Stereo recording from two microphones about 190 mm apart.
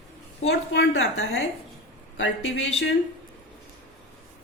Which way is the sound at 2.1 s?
90° left.